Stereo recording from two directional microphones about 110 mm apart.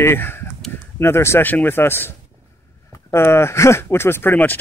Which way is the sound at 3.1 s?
25° left (ahead or behind).